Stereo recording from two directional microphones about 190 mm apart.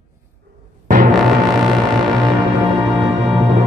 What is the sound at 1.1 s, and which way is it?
Music, centre (ahead or behind).